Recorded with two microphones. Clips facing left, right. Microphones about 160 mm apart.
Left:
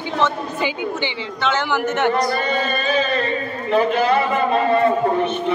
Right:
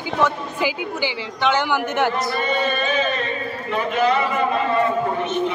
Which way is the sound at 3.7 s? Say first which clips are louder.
Left 3 dB; 35° left (ahead or behind).